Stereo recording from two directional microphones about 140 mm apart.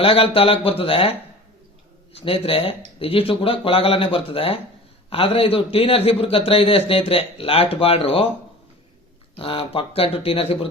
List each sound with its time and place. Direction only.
0.0 s speech: 40° left (ahead or behind)
2.1 s a man's voice: 45° left (ahead or behind)
9.4 s speech: 40° left (ahead or behind)